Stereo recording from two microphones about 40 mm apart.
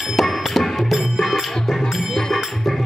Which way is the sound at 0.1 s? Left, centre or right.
Centre.